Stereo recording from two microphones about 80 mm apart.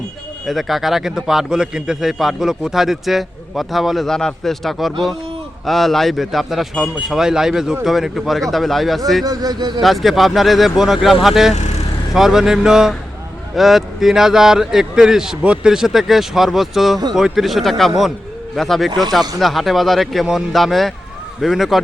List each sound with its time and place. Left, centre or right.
0.4 s a man's voice: centre
9.2 s speech: right
9.8 s a man's voice: centre